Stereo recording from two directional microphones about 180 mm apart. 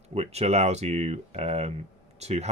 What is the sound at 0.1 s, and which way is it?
Speech, 35° right (ahead or behind).